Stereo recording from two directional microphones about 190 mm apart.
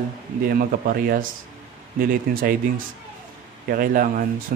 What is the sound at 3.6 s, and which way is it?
Speech, 45° right (ahead or behind).